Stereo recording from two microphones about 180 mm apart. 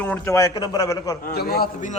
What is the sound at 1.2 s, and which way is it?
Speech, 60° left (ahead or behind).